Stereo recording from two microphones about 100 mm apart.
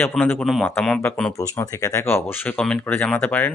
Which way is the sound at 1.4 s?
35° left (ahead or behind).